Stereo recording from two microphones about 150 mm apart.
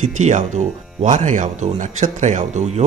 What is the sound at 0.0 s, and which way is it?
Speech, 55° right (ahead or behind).